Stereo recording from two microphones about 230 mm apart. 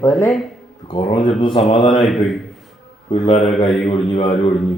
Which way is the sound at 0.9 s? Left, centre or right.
Left.